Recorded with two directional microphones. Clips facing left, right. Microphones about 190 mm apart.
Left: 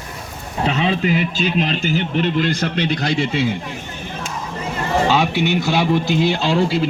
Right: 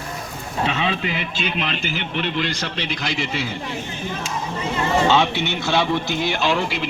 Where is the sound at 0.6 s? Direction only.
35° left (ahead or behind).